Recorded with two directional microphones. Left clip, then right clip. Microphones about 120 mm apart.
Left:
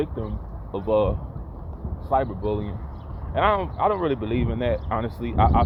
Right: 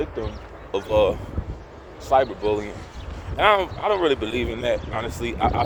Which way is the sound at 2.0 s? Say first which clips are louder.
Right 4 dB; 40° right (ahead or behind).